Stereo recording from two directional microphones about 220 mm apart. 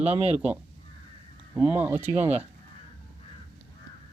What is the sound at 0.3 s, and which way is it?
Speech, 5° right (ahead or behind).